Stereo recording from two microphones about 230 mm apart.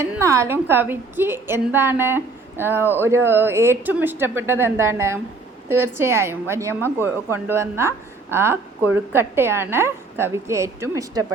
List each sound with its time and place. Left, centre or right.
0.0 s a woman's voice: centre